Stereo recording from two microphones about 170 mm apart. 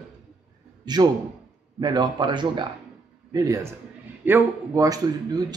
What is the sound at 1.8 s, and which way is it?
Speech, 25° right (ahead or behind).